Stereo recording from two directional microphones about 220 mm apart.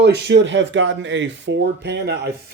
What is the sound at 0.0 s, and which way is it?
Speech, 50° right (ahead or behind).